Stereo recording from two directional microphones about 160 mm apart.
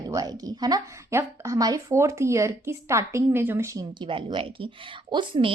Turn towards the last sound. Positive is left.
turn(degrees=-30)  # may be behind; listen again after turning